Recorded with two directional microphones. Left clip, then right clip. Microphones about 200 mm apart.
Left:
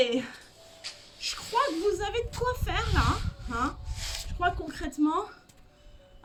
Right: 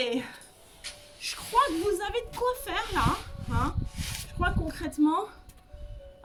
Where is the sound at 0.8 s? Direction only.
20° right (ahead or behind).